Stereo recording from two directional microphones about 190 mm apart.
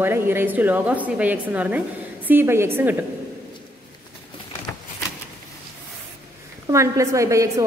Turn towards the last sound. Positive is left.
turn(degrees=-15)  # may be behind; listen again after turning